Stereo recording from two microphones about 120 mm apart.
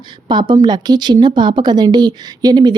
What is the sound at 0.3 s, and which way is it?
Speech, 40° right (ahead or behind).